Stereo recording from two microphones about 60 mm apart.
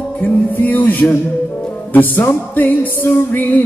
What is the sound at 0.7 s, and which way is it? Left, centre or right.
Music, left.